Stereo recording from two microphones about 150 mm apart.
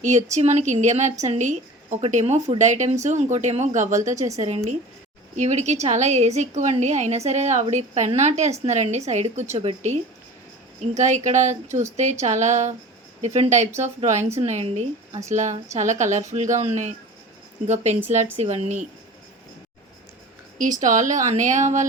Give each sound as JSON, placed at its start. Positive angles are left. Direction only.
{"t": 0.0, "sound": "a woman's voice", "side_deg": -50}
{"t": 20.6, "sound": "a woman's voice", "side_deg": -60}